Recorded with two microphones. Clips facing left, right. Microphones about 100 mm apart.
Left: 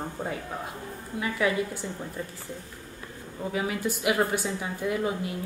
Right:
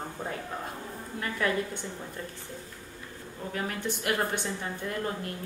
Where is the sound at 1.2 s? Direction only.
5° left (ahead or behind).